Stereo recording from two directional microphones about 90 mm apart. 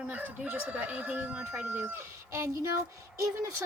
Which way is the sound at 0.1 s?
20° right (ahead or behind).